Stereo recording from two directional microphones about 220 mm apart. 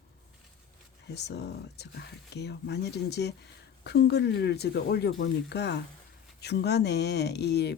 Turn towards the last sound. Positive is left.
turn(degrees=50)  # may be behind; listen again after turning